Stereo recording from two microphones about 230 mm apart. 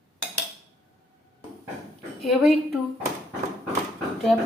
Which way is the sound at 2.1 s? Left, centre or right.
Centre.